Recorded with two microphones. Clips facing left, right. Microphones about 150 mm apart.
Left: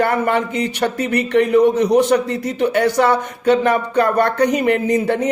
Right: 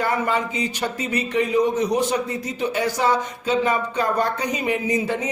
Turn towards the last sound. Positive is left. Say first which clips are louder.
# left 6 dB
turn(degrees=65)  # may be behind; listen again after turning